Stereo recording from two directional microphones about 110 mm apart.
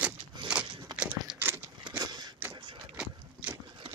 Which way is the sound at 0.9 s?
15° right (ahead or behind).